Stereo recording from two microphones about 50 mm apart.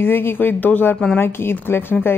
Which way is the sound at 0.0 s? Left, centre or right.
Left.